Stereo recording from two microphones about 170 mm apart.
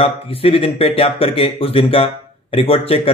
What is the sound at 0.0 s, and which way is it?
A man's voice, 35° left (ahead or behind).